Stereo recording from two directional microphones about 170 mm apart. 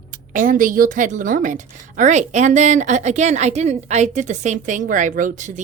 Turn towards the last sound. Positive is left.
turn(degrees=-50)  # may be behind; listen again after turning